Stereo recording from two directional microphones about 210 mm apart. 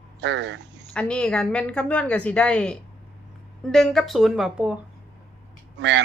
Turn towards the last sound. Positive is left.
turn(degrees=-55)  # may be behind; listen again after turning